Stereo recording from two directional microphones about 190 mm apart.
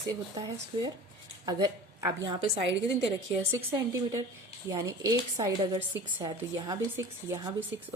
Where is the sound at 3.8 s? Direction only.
15° right (ahead or behind).